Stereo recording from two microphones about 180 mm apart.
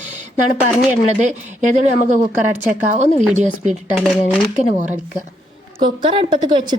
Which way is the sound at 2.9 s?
40° right (ahead or behind).